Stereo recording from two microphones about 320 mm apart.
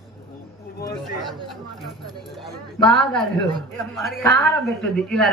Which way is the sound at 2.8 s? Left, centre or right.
Centre.